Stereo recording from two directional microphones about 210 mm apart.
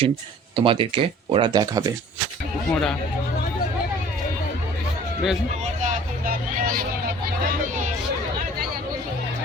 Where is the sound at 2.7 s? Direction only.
Centre (ahead or behind).